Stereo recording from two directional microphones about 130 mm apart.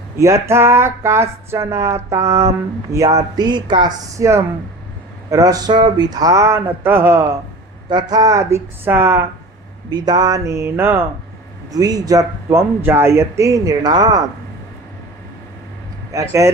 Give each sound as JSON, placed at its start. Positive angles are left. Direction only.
{"t": 0.2, "sound": "speech", "side_deg": -20}
{"t": 3.3, "sound": "a sound", "side_deg": -35}
{"t": 4.2, "sound": "speech", "side_deg": -25}
{"t": 7.9, "sound": "speech", "side_deg": -35}
{"t": 9.9, "sound": "speech", "side_deg": -30}
{"t": 11.7, "sound": "speech", "side_deg": -30}
{"t": 16.1, "sound": "speech", "side_deg": -25}